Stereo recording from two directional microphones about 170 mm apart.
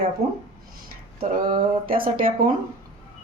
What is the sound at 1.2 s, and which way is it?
A woman's voice, 55° right (ahead or behind).